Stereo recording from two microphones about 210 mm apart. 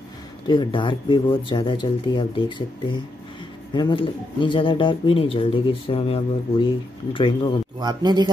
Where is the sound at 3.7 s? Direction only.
20° left (ahead or behind).